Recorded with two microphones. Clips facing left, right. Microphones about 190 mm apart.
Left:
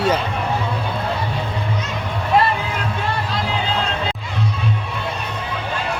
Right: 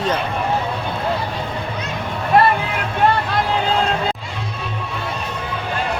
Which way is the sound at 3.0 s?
60° right (ahead or behind).